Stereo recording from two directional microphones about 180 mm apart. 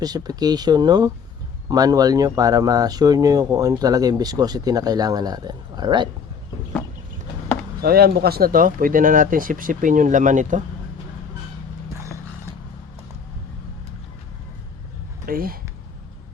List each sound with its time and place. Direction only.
0.0 s speech: 20° right (ahead or behind)
7.8 s speech: 55° right (ahead or behind)
15.3 s speech: 55° right (ahead or behind)